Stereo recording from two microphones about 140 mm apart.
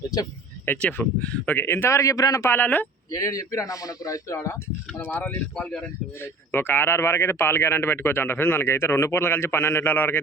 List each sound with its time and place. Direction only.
0.6 s speech: 15° left (ahead or behind)
3.2 s speech: 25° left (ahead or behind)
5.5 s speech: 5° left (ahead or behind)
6.1 s speech: 15° left (ahead or behind)